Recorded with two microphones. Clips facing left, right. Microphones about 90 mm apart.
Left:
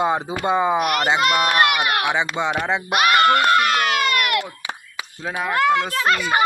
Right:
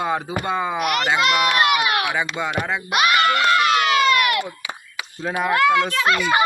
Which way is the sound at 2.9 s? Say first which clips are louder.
Left 2 dB; 45° left (ahead or behind).